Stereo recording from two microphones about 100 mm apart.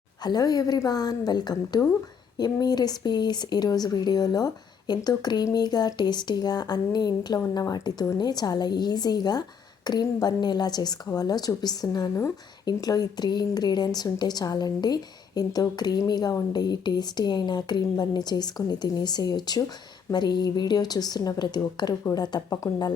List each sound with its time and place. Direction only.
0.2 s a woman's voice: 40° left (ahead or behind)